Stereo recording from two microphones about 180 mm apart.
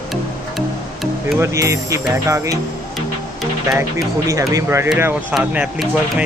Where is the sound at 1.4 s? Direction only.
15° right (ahead or behind).